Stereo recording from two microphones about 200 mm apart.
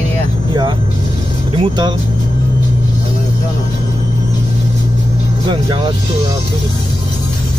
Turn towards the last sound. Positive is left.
turn(degrees=-20)  # may be behind; listen again after turning